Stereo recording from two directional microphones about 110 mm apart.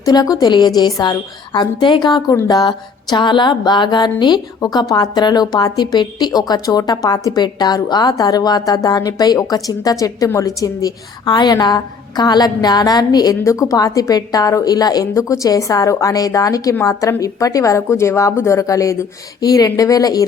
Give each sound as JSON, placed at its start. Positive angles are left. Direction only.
{"t": 0.0, "sound": "music", "side_deg": 35}
{"t": 2.3, "sound": "a woman's voice", "side_deg": 25}
{"t": 2.6, "sound": "music", "side_deg": 40}
{"t": 16.8, "sound": "a woman's voice", "side_deg": 30}
{"t": 19.4, "sound": "music", "side_deg": 35}